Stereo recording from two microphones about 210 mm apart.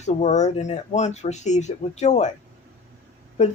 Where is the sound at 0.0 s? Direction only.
35° left (ahead or behind).